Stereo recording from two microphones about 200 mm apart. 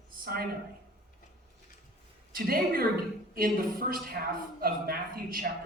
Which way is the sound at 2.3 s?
50° right (ahead or behind).